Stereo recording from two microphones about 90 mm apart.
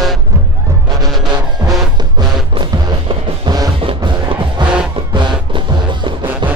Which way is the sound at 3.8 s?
70° right (ahead or behind).